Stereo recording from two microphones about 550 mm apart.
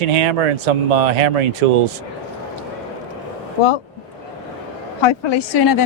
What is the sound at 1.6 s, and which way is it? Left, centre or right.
Speech, right.